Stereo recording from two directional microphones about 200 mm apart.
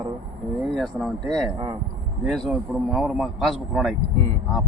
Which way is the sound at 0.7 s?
Centre (ahead or behind).